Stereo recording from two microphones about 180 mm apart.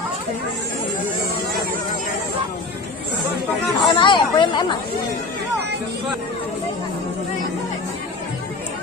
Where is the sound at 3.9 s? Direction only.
25° left (ahead or behind).